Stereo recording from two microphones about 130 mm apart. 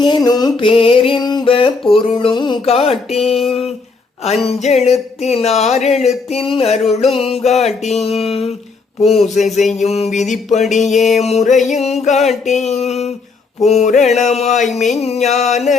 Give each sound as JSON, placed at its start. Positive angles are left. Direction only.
{"t": 0.0, "sound": "mantra", "side_deg": 35}
{"t": 1.2, "sound": "mantra", "side_deg": 35}
{"t": 1.5, "sound": "speech", "side_deg": 45}
{"t": 2.6, "sound": "speech", "side_deg": 50}
{"t": 3.2, "sound": "a sound", "side_deg": 0}
{"t": 4.4, "sound": "music", "side_deg": 55}
{"t": 6.3, "sound": "speech", "side_deg": 45}
{"t": 7.2, "sound": "music", "side_deg": 50}
{"t": 7.9, "sound": "speech", "side_deg": 50}
{"t": 9.7, "sound": "music", "side_deg": 55}
{"t": 12.2, "sound": "a sound", "side_deg": 0}
{"t": 12.5, "sound": "music", "side_deg": 60}